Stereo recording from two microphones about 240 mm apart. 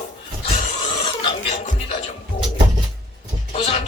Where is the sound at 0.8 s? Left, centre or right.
Left.